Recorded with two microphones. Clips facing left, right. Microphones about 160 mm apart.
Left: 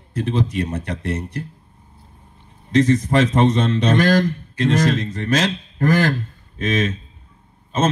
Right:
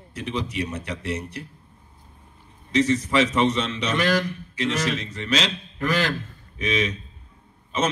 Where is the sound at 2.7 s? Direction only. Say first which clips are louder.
Left 5 dB; 55° left (ahead or behind).